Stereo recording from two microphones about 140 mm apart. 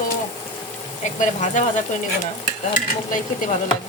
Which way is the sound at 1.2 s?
60° left (ahead or behind).